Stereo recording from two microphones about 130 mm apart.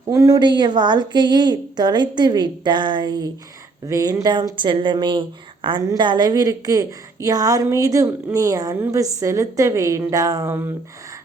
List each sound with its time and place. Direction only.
0.1 s a woman's voice: 25° right (ahead or behind)